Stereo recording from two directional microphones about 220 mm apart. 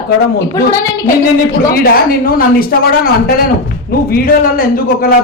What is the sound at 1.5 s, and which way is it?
A man's voice, 45° left (ahead or behind).